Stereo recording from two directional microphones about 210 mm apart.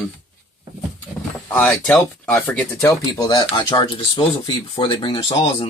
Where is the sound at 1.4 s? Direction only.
5° left (ahead or behind).